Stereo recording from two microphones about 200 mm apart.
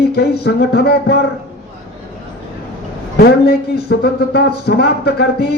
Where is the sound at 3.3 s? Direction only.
55° left (ahead or behind).